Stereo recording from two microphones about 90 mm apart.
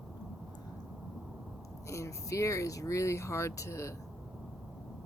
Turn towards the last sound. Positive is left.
turn(degrees=35)  # may be behind; listen again after turning